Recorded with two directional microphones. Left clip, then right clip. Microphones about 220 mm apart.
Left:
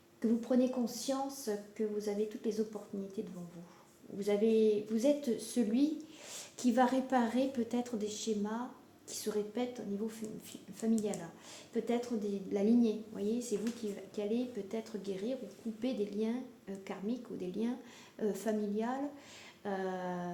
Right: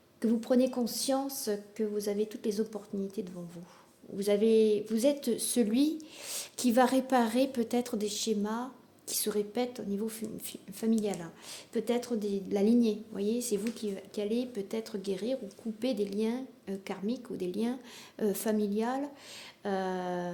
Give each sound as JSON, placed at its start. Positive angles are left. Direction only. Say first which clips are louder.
{"t": 0.2, "sound": "a woman's voice", "louder": "right 4 dB", "side_deg": -50}